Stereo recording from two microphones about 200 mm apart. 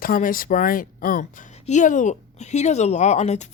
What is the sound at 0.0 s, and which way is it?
A woman's voice, 45° left (ahead or behind).